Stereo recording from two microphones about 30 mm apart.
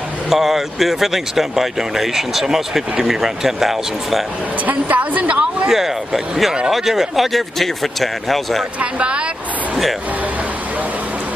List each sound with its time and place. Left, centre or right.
0.3 s speech: centre
4.6 s a woman's voice: right
5.3 s speech: right
5.7 s speech: centre
7.3 s a man's voice: centre